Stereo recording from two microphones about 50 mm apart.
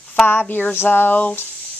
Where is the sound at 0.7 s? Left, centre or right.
Left.